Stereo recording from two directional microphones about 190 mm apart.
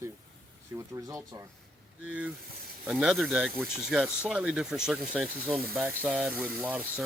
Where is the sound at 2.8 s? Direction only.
5° right (ahead or behind).